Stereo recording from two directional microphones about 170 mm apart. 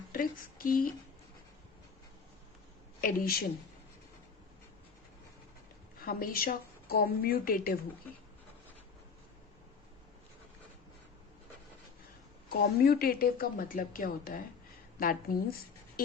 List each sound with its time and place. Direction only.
0.1 s speech: 55° left (ahead or behind)
3.0 s a woman's voice: 55° left (ahead or behind)
6.1 s a woman's voice: 60° left (ahead or behind)
12.5 s a woman's voice: 65° left (ahead or behind)